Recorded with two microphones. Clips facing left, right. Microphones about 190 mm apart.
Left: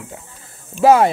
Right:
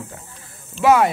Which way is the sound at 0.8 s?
30° left (ahead or behind).